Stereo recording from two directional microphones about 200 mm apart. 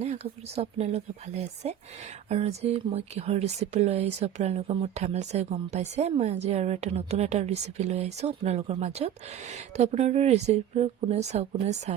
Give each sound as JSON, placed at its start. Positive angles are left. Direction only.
{"t": 0.0, "sound": "speech", "side_deg": -30}